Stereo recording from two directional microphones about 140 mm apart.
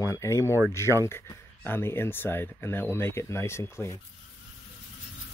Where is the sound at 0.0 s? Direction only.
20° left (ahead or behind).